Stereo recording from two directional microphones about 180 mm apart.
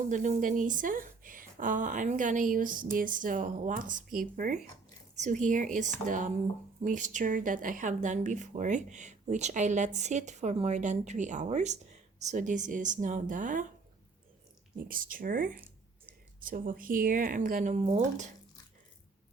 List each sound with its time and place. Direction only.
0.1 s speech: 45° right (ahead or behind)
14.8 s speech: 50° right (ahead or behind)